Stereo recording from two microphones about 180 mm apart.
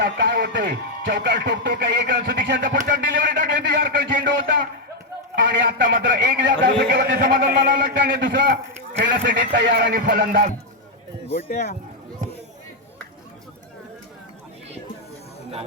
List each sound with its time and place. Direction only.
0.0 s speech: 70° right (ahead or behind)
2.8 s a sound: 75° right (ahead or behind); by 4.5 s 60° right (ahead or behind)
5.3 s a man's voice: 70° right (ahead or behind)
11.3 s speech: 50° left (ahead or behind)